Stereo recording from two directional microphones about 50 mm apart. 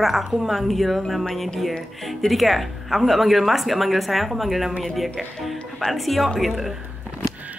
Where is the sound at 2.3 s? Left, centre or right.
Centre.